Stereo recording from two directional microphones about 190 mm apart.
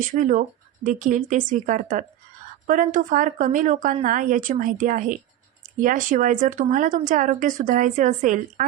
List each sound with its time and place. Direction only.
0.0 s speech: 40° right (ahead or behind)